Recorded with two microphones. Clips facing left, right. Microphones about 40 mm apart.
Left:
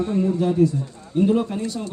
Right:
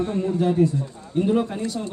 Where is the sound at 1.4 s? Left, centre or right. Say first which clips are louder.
Even; centre.